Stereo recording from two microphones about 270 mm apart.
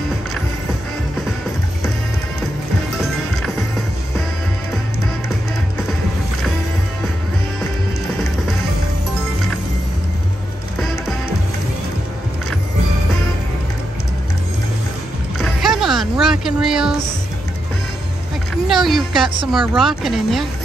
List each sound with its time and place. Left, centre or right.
15.3 s music: centre
18.7 s music: centre
19.7 s speech: centre